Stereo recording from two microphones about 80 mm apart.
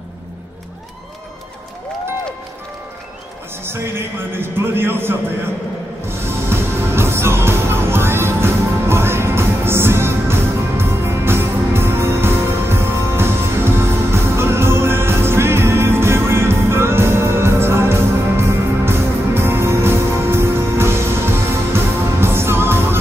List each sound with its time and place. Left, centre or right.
3.6 s a man's voice: right
6.0 s music: right